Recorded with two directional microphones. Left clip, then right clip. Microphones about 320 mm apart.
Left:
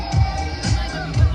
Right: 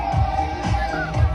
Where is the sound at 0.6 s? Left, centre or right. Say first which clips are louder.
Right 3 dB; centre.